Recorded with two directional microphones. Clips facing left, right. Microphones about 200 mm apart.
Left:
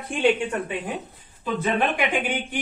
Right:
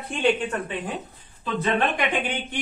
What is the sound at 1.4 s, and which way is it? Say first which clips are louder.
Speech: even; 10° left (ahead or behind).